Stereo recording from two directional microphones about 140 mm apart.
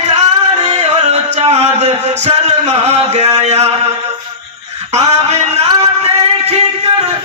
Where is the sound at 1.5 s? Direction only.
50° right (ahead or behind).